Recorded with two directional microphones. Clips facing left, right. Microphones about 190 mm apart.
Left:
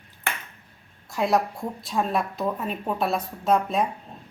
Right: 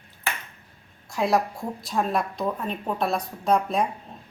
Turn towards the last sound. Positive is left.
turn(degrees=0)  # may be behind; listen again after turning